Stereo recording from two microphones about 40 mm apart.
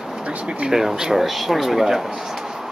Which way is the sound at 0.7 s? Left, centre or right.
Centre.